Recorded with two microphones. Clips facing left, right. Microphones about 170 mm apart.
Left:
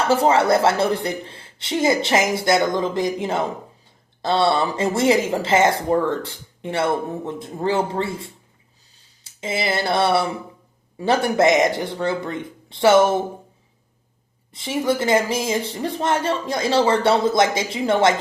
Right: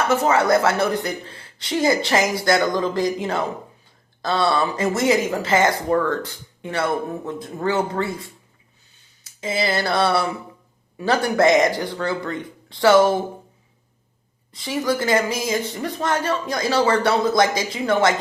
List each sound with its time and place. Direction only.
0.0 s speech: 30° left (ahead or behind)
9.2 s a sound: 25° left (ahead or behind)
10.9 s speech: 25° left (ahead or behind)
14.5 s speech: 25° left (ahead or behind)